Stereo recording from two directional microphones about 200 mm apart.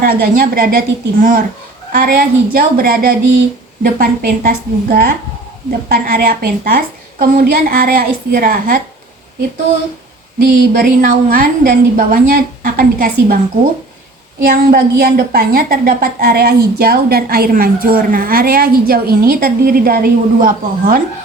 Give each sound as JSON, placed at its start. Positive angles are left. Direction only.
{"t": 0.0, "sound": "a woman's voice", "side_deg": -45}
{"t": 10.8, "sound": "a woman's voice", "side_deg": -45}
{"t": 14.4, "sound": "a woman's voice", "side_deg": -45}